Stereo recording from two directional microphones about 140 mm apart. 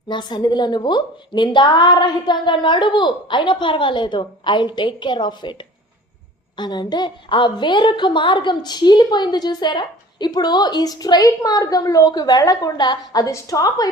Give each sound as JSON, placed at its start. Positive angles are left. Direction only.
{"t": 0.1, "sound": "a woman's voice", "side_deg": 30}
{"t": 6.6, "sound": "a woman's voice", "side_deg": 30}